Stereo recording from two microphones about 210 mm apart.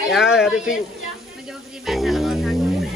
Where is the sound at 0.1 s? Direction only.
Centre (ahead or behind).